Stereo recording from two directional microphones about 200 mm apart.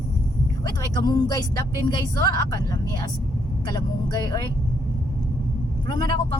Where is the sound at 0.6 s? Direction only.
20° left (ahead or behind).